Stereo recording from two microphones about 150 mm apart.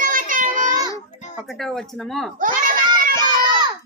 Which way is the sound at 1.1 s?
50° left (ahead or behind).